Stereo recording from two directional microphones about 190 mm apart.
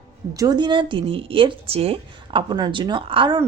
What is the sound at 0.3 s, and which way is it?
A woman's voice, 20° right (ahead or behind).